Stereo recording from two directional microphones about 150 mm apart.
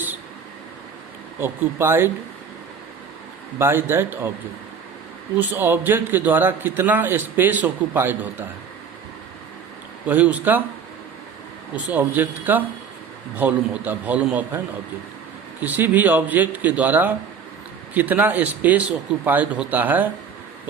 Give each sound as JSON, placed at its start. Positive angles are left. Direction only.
{"t": 1.4, "sound": "a man's voice", "side_deg": -15}
{"t": 3.6, "sound": "a man's voice", "side_deg": -15}
{"t": 5.4, "sound": "a man's voice", "side_deg": -10}
{"t": 10.1, "sound": "a man's voice", "side_deg": -10}
{"t": 11.9, "sound": "a man's voice", "side_deg": -10}
{"t": 15.6, "sound": "a man's voice", "side_deg": -10}